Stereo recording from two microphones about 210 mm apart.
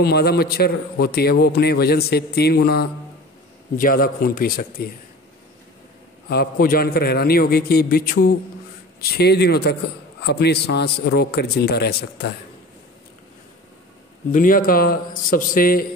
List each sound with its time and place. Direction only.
0.0 s a man's voice: 50° left (ahead or behind)
6.2 s a man's voice: 50° left (ahead or behind)
14.3 s a man's voice: 40° left (ahead or behind)